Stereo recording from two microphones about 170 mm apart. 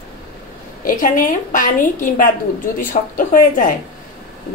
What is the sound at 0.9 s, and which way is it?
A woman's voice, 50° left (ahead or behind).